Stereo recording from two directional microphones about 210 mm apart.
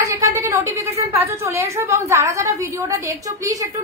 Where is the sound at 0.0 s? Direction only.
15° right (ahead or behind).